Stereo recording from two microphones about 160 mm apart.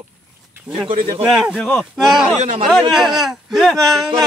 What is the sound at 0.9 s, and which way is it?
Speech, 35° right (ahead or behind).